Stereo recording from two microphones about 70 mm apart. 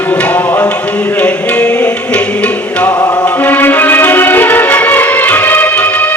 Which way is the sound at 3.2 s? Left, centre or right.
Left.